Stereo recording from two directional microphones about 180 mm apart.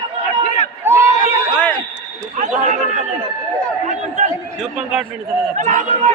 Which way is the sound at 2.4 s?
45° right (ahead or behind).